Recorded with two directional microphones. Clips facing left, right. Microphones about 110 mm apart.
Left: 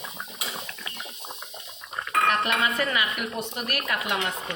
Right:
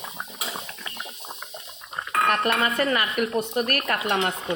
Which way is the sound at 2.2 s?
45° right (ahead or behind).